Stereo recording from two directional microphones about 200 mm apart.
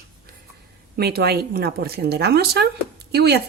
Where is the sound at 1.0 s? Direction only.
50° right (ahead or behind).